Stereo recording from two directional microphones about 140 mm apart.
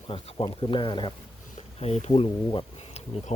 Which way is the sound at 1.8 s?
50° left (ahead or behind).